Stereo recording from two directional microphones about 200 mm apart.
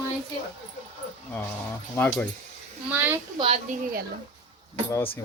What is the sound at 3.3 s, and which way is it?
Speech, 25° right (ahead or behind).